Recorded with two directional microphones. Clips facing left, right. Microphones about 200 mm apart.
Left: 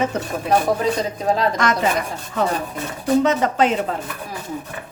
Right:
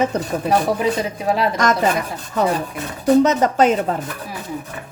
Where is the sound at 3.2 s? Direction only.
45° right (ahead or behind).